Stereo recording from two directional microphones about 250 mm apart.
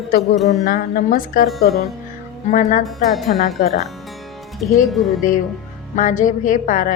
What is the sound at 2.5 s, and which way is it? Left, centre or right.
Speech, left.